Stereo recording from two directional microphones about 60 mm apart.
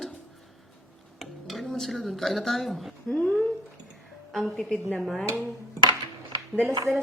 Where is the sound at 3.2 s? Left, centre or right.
Centre.